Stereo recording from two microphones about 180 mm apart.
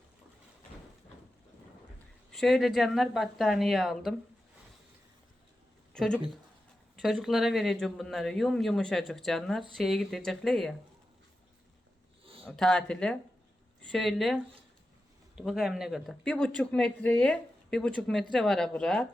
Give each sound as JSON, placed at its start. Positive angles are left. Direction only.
{"t": 2.3, "sound": "a man's voice", "side_deg": 0}
{"t": 5.9, "sound": "a man's voice", "side_deg": 5}
{"t": 12.2, "sound": "a sound", "side_deg": -30}
{"t": 12.5, "sound": "a man's voice", "side_deg": 5}
{"t": 15.4, "sound": "a man's voice", "side_deg": 0}